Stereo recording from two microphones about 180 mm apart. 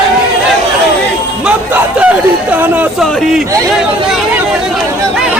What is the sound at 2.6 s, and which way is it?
Speech, 10° right (ahead or behind).